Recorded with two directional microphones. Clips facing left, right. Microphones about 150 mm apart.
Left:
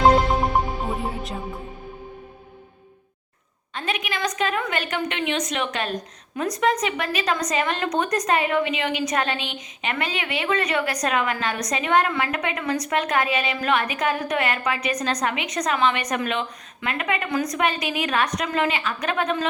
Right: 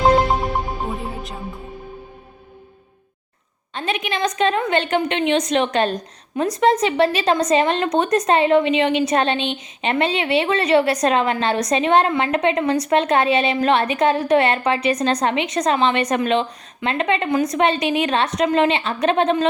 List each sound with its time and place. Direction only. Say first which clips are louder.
3.8 s a woman's voice: right 5 dB; 25° right (ahead or behind)